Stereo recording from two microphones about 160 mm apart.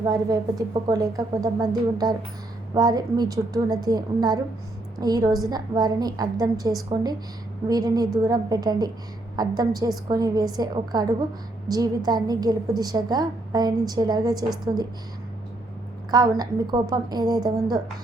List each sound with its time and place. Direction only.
0.0 s a woman's voice: 25° right (ahead or behind)
16.1 s a woman's voice: 25° right (ahead or behind)